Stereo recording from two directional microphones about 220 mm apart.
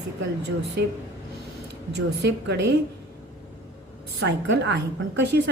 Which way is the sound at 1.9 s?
50° right (ahead or behind).